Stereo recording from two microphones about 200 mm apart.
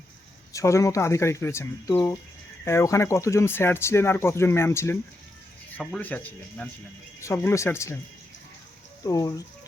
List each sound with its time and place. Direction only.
0.5 s speech: 15° left (ahead or behind)
9.0 s speech: 15° left (ahead or behind)